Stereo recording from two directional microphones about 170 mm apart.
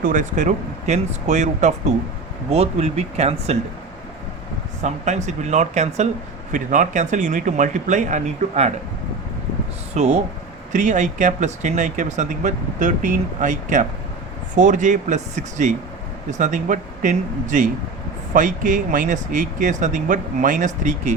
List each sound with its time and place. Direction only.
0.0 s speech: 50° right (ahead or behind)
4.8 s speech: 45° right (ahead or behind)
9.9 s speech: 40° right (ahead or behind)